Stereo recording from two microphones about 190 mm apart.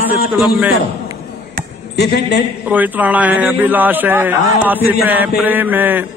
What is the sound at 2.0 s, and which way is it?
Speech, 60° left (ahead or behind).